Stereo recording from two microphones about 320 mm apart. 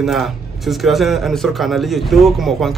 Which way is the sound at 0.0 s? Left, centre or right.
Centre.